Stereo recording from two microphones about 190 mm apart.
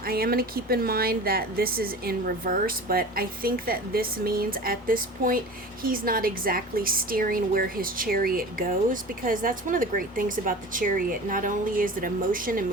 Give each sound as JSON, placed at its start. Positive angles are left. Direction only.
{"t": 0.0, "sound": "a woman's voice", "side_deg": -50}